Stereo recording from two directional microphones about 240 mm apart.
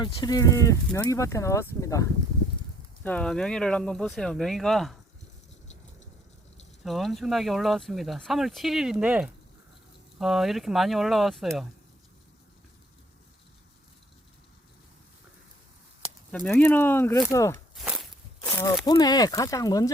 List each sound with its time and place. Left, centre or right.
0.0 s speech: centre
6.8 s speech: centre
16.3 s speech: centre
17.7 s walk: centre
18.4 s a sound: centre
18.9 s speech: centre